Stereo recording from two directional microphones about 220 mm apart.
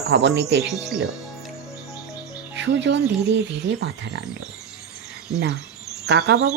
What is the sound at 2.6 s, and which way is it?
Speech, 55° right (ahead or behind).